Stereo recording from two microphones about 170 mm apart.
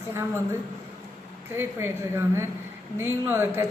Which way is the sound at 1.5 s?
15° right (ahead or behind).